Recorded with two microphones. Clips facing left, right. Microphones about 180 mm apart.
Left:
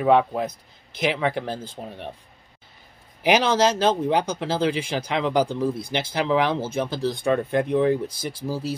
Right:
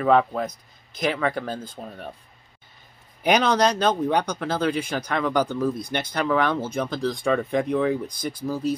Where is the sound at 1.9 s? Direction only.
25° left (ahead or behind).